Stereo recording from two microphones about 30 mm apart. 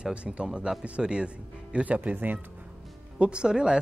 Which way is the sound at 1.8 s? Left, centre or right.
Right.